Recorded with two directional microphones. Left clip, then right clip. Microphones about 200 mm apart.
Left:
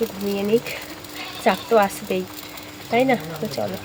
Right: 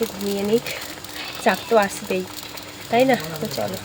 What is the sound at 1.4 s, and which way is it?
Speech, 5° left (ahead or behind).